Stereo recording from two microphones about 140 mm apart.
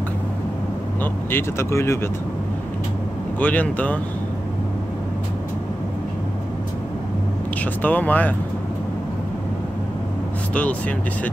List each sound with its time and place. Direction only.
1.3 s speech: 20° left (ahead or behind)
3.3 s speech: 10° left (ahead or behind)
7.8 s speech: 10° left (ahead or behind)
10.5 s speech: 10° left (ahead or behind)